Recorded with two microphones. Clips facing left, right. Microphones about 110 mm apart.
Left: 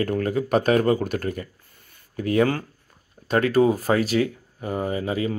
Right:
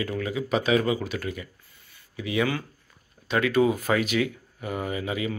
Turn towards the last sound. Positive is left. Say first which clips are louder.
# left 4 dB
turn(degrees=35)  # may be behind; listen again after turning